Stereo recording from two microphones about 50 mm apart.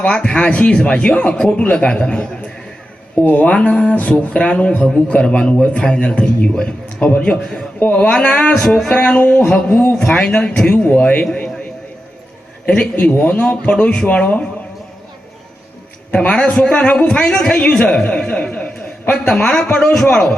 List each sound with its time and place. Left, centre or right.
0.0 s a man's voice: centre
3.2 s speech: left
3.4 s a man's voice: left
9.5 s a man's voice: centre
13.0 s a man's voice: left
16.1 s a man's voice: left
19.3 s speech: centre